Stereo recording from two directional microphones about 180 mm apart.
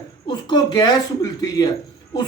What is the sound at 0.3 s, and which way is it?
A man's voice, 25° left (ahead or behind).